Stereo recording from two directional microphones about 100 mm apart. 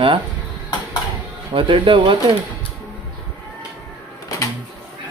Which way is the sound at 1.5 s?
60° right (ahead or behind).